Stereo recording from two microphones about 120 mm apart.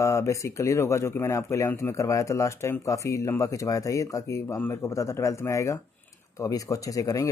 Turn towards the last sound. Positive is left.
turn(degrees=30)  # may be behind; listen again after turning